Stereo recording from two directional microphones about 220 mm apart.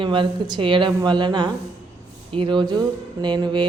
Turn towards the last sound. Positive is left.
turn(degrees=-20)  # may be behind; listen again after turning